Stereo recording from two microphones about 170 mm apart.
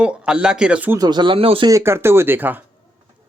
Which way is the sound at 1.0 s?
25° right (ahead or behind).